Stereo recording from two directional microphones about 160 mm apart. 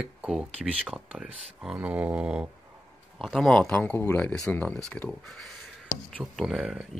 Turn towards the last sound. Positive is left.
turn(degrees=-5)  # may be behind; listen again after turning